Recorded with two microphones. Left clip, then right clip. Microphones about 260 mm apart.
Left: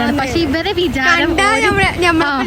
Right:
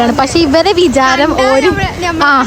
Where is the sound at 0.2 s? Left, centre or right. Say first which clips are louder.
Right 7 dB; centre.